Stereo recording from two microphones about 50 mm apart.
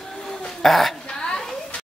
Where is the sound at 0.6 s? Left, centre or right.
Centre.